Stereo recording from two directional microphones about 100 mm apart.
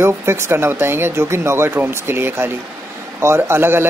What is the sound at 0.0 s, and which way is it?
Speech, 25° right (ahead or behind).